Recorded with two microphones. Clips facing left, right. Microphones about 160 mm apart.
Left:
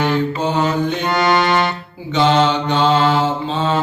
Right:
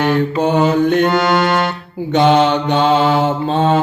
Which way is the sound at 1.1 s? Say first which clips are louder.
Right 1 dB; 5° right (ahead or behind).